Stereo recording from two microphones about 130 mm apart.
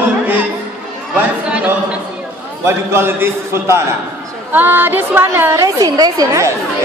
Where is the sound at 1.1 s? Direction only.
10° right (ahead or behind).